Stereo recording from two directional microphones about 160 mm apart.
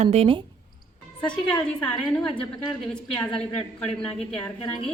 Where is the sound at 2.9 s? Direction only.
5° left (ahead or behind).